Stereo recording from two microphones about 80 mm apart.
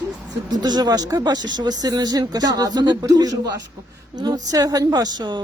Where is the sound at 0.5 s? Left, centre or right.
Right.